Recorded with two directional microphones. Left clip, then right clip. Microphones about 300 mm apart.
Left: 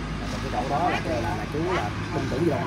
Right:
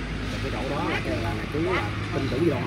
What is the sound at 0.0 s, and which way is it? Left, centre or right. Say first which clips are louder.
Vehicle: even; left.